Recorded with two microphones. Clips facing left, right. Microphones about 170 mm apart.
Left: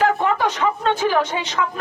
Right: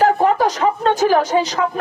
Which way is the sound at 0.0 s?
40° right (ahead or behind).